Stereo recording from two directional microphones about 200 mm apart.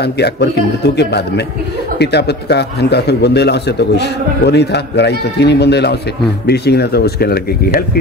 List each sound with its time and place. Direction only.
0.0 s a man's voice: 55° left (ahead or behind)